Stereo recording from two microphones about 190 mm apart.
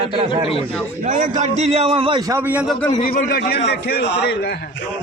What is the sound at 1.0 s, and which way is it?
A man's voice, 40° right (ahead or behind).